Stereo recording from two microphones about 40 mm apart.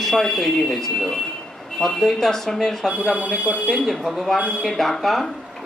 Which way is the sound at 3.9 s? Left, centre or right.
Centre.